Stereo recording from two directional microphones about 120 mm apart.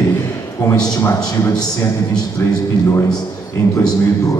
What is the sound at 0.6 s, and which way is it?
A man's voice, 35° left (ahead or behind).